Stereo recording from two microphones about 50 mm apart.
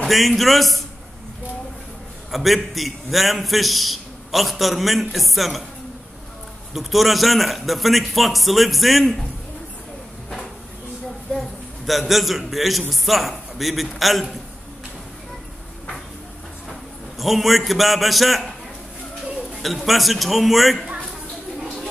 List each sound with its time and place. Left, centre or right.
0.1 s a man's voice: centre
2.3 s a man's voice: centre
6.7 s a man's voice: centre
11.3 s a man's voice: centre
17.2 s a man's voice: centre
19.5 s a man's voice: centre
20.8 s a sound: centre